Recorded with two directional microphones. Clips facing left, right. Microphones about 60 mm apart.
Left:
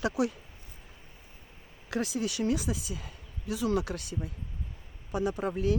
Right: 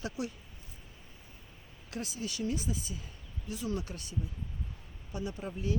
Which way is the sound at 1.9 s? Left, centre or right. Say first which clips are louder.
Left 8 dB; left.